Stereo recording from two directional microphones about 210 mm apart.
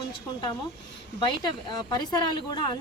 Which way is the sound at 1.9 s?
20° left (ahead or behind).